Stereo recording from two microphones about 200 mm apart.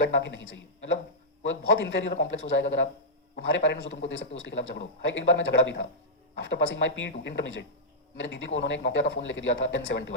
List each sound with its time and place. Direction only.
0.0 s a man's voice: 65° left (ahead or behind)